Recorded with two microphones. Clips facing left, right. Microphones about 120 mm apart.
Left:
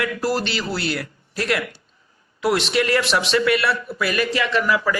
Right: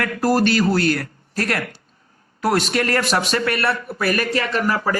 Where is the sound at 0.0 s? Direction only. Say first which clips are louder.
Right 4 dB; 45° right (ahead or behind).